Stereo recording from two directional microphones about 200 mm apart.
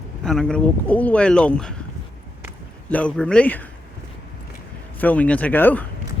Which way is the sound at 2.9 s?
5° left (ahead or behind).